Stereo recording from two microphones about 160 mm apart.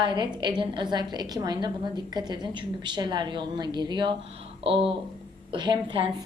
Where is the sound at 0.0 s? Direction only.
30° right (ahead or behind).